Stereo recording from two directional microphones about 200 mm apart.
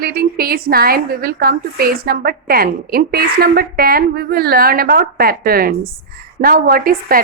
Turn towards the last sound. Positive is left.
turn(degrees=-45)  # may be behind; listen again after turning